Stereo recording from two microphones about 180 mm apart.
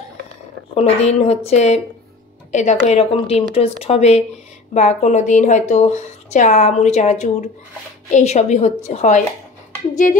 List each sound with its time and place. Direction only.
0.7 s a woman's voice: 35° left (ahead or behind)
10.0 s music: 45° left (ahead or behind)